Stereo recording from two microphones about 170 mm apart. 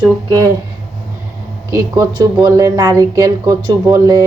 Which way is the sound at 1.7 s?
20° right (ahead or behind).